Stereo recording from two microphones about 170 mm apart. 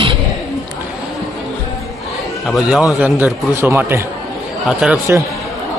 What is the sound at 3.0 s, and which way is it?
A man's voice, 10° right (ahead or behind).